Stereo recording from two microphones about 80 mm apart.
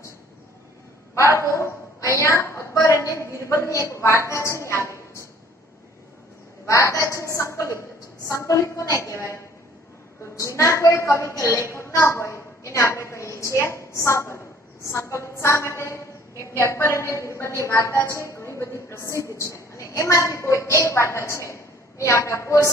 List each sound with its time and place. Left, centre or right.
1.1 s a woman's voice: left
6.6 s speech: left